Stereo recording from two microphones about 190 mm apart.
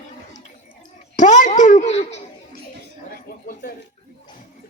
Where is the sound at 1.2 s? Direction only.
40° left (ahead or behind).